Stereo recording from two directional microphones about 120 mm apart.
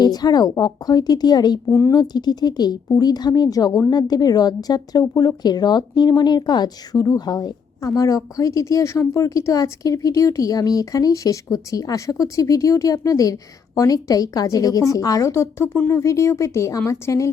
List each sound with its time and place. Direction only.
0.0 s speech: 35° left (ahead or behind)
1.7 s a woman's voice: 20° left (ahead or behind)
2.0 s a woman's voice: 35° left (ahead or behind)